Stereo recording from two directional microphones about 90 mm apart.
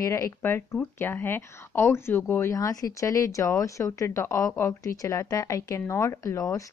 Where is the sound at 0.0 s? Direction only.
35° left (ahead or behind).